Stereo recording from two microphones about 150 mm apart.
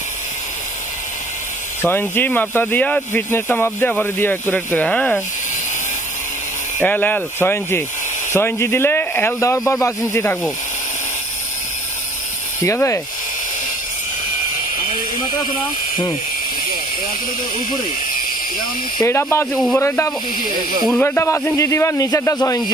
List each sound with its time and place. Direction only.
1.8 s speech: 15° left (ahead or behind)
6.8 s speech: 10° left (ahead or behind)
12.6 s speech: 20° left (ahead or behind)
19.0 s speech: 15° left (ahead or behind)
19.5 s a man's voice: centre (ahead or behind)
19.8 s a man's voice: 20° left (ahead or behind)